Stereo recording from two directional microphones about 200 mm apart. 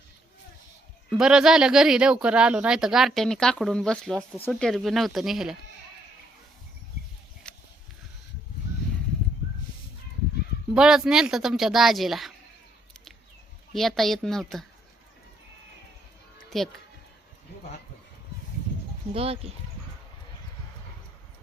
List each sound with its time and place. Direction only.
1.1 s speech: 5° right (ahead or behind)
7.4 s a sound: 5° left (ahead or behind)
10.8 s speech: 5° right (ahead or behind)
13.7 s speech: centre (ahead or behind)
16.5 s speech: centre (ahead or behind)
19.1 s speech: 30° right (ahead or behind)